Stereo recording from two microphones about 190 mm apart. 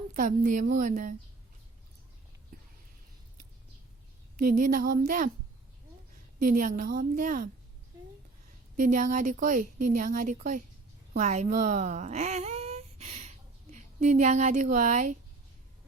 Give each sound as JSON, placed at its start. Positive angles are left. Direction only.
{"t": 0.1, "sound": "a woman's voice", "side_deg": -45}
{"t": 4.4, "sound": "a woman's voice", "side_deg": -45}
{"t": 6.4, "sound": "a woman's voice", "side_deg": -45}
{"t": 8.7, "sound": "a woman's voice", "side_deg": -45}